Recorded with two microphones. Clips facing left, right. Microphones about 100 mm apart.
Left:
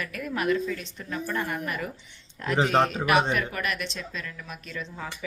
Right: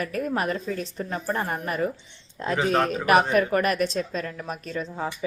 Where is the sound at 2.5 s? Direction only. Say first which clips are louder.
Even; 30° left (ahead or behind).